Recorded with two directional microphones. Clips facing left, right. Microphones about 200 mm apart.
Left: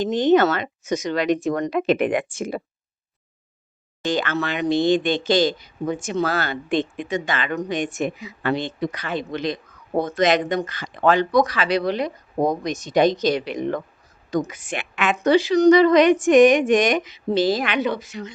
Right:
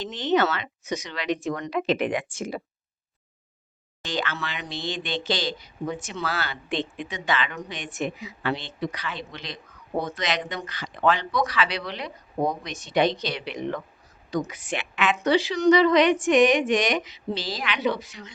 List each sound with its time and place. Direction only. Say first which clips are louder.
0.0 s speech: left 7 dB; 45° left (ahead or behind)
4.0 s speech: left 7 dB; 50° left (ahead or behind)